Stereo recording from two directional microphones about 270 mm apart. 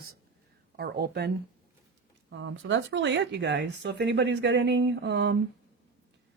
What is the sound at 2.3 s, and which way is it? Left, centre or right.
Speech, right.